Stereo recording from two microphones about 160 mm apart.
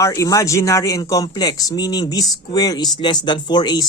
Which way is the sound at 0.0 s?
20° left (ahead or behind).